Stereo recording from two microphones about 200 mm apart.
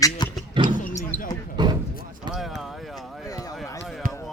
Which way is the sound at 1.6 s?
20° right (ahead or behind).